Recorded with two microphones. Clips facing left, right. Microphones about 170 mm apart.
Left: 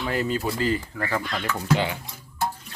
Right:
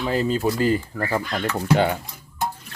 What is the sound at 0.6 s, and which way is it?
Speech, 40° right (ahead or behind).